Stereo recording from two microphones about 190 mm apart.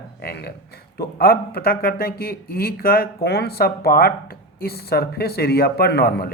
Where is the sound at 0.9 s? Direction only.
55° left (ahead or behind).